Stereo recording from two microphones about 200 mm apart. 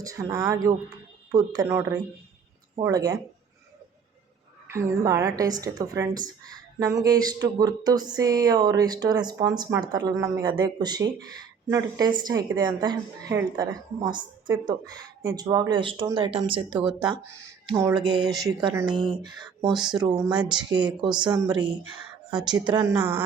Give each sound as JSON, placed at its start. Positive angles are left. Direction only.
{"t": 0.0, "sound": "a woman's voice", "side_deg": -15}
{"t": 4.7, "sound": "a woman's voice", "side_deg": -15}
{"t": 17.0, "sound": "a woman's voice", "side_deg": -15}
{"t": 22.3, "sound": "speech", "side_deg": -5}
{"t": 22.5, "sound": "a woman's voice", "side_deg": -20}